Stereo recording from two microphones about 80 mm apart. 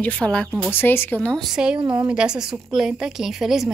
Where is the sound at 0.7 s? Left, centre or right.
Left.